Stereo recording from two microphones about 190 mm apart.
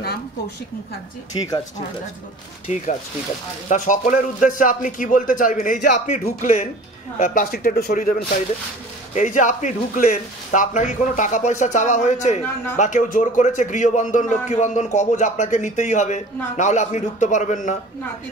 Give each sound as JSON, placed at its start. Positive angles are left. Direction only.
{"t": 3.6, "sound": "a man's voice", "side_deg": 40}